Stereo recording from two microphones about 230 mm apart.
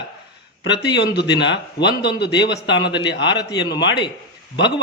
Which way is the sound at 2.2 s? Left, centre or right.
Centre.